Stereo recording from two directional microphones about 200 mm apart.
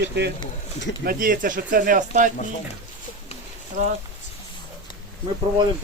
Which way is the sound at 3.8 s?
35° right (ahead or behind).